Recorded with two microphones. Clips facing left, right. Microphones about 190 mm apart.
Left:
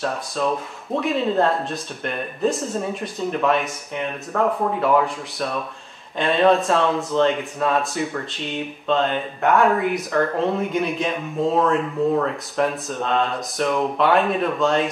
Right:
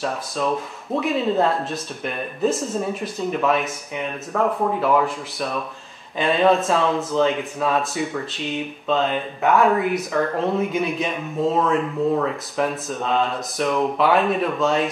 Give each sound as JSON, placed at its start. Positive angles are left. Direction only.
{"t": 0.0, "sound": "speech", "side_deg": 0}